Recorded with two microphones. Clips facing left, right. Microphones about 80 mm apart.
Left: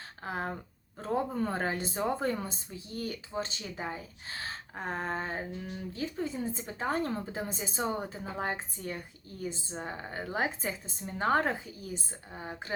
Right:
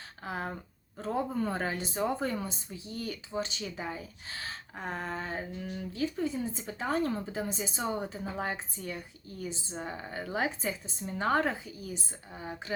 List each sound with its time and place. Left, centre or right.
0.3 s speech: left